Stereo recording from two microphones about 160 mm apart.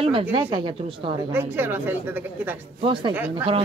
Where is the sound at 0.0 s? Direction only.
35° right (ahead or behind).